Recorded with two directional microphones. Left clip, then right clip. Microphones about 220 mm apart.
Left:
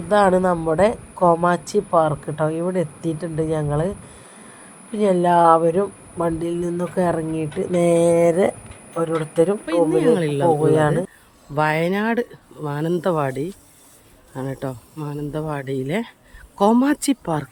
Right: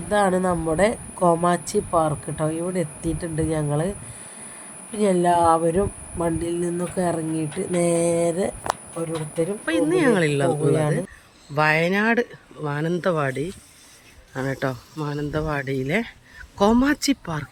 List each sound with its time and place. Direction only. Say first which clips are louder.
0.1 s speech: left 4 dB; 20° left (ahead or behind)
4.9 s speech: left 3 dB; 5° left (ahead or behind); by 9.6 s 20° left (ahead or behind)
9.6 s speech: left 3 dB; 5° left (ahead or behind)